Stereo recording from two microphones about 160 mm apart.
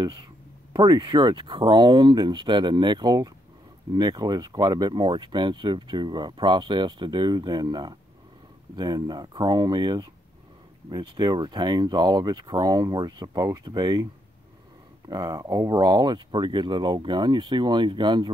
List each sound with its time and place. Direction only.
0.0 s speech: 30° right (ahead or behind)
15.0 s speech: 25° right (ahead or behind)